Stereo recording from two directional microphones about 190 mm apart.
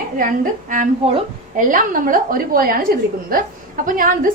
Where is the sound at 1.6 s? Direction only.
45° right (ahead or behind).